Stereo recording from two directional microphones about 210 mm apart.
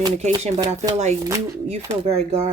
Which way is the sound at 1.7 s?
30° right (ahead or behind).